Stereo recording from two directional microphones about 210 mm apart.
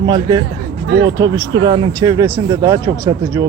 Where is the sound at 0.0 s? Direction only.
20° right (ahead or behind).